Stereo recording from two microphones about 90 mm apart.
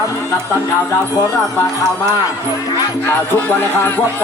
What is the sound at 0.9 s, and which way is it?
Speech, 30° left (ahead or behind).